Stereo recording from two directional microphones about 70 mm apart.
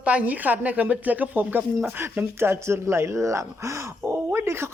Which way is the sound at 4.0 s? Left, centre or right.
Right.